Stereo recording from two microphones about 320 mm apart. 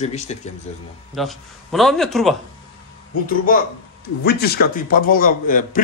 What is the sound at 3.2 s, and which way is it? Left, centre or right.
Speech, left.